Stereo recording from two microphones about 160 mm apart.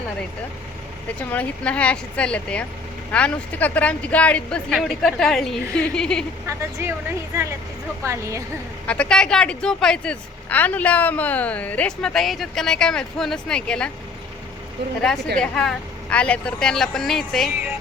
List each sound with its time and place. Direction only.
1.3 s a woman's voice: 10° left (ahead or behind)
6.5 s a woman's voice: 20° right (ahead or behind)
8.9 s a woman's voice: 5° left (ahead or behind)
15.4 s a woman's voice: 5° left (ahead or behind)